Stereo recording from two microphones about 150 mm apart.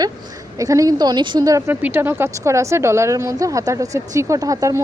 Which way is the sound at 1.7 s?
10° right (ahead or behind).